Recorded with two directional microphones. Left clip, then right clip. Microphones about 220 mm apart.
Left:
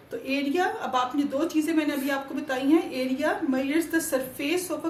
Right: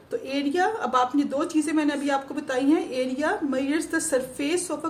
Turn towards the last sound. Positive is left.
turn(degrees=-40)  # may be behind; listen again after turning